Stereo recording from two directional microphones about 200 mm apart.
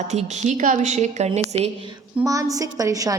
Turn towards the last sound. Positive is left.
turn(degrees=-15)  # may be behind; listen again after turning